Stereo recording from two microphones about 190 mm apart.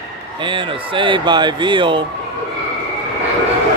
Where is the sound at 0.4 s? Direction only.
25° right (ahead or behind).